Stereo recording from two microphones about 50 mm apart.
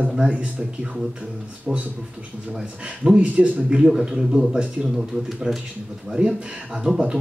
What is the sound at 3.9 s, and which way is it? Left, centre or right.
A man's voice, centre.